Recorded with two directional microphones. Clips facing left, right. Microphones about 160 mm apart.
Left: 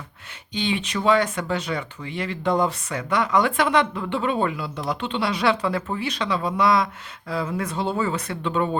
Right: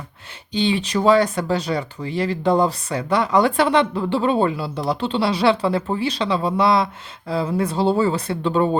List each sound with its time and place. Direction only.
0.5 s speech: 35° right (ahead or behind)